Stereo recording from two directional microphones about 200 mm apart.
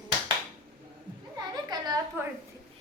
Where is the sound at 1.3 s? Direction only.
20° right (ahead or behind).